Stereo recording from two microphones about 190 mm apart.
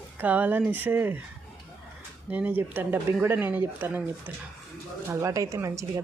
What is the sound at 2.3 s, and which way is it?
Speech, 10° right (ahead or behind).